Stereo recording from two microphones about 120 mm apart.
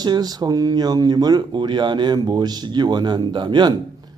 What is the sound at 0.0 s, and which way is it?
Speech, 35° right (ahead or behind).